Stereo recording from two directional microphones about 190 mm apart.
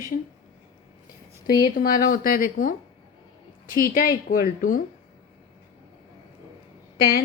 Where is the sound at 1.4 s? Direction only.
20° left (ahead or behind).